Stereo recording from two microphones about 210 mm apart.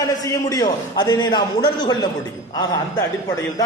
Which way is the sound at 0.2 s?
15° left (ahead or behind).